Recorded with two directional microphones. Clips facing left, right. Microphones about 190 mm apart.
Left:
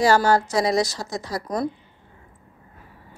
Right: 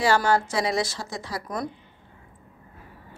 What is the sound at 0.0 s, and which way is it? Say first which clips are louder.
A woman's voice: left 4 dB; 40° left (ahead or behind).